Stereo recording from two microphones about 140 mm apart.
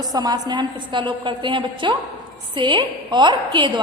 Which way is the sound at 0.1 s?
30° right (ahead or behind).